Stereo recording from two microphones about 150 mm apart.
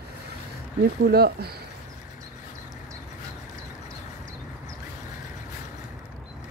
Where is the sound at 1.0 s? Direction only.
90° right.